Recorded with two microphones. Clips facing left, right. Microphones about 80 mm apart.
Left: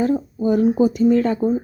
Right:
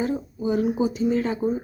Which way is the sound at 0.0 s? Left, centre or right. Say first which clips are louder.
Left 6 dB; left.